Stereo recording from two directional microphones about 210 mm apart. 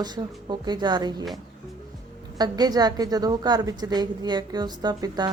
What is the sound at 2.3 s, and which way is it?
Speech, 20° right (ahead or behind).